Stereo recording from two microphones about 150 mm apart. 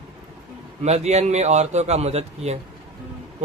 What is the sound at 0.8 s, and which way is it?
A man's voice, 45° right (ahead or behind).